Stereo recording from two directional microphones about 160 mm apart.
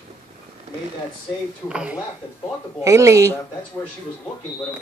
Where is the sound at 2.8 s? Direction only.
20° right (ahead or behind).